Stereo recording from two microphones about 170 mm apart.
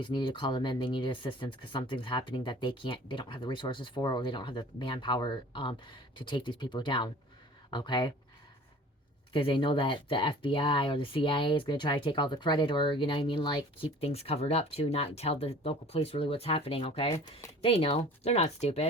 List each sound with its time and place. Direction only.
0.0 s speech: 30° left (ahead or behind)
9.3 s speech: 30° left (ahead or behind)